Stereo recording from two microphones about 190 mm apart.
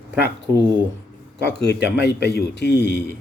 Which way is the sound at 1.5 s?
60° left (ahead or behind).